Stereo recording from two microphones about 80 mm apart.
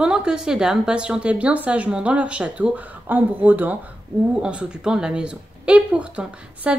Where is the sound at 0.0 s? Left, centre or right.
Centre.